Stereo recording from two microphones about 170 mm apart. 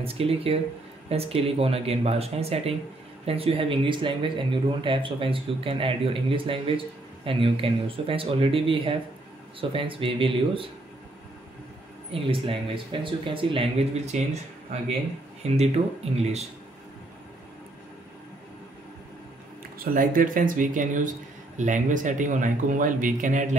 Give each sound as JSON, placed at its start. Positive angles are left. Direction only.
{"t": 0.0, "sound": "speech", "side_deg": -35}
{"t": 12.1, "sound": "speech", "side_deg": -35}
{"t": 19.8, "sound": "speech", "side_deg": -60}